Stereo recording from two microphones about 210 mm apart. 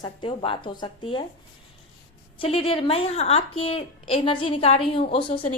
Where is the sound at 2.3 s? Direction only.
25° left (ahead or behind).